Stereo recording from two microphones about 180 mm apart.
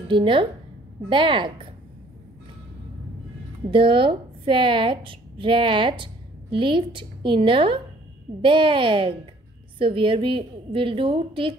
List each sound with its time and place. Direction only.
0.1 s a woman's voice: 25° right (ahead or behind)
3.7 s a woman's voice: 30° right (ahead or behind)